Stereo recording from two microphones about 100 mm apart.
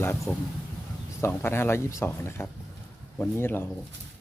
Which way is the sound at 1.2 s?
25° left (ahead or behind).